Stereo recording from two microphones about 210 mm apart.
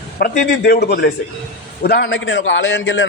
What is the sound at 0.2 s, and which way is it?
A man's voice, 45° left (ahead or behind).